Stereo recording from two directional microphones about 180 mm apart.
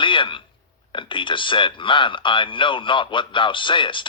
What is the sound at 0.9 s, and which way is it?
Speech, 25° left (ahead or behind).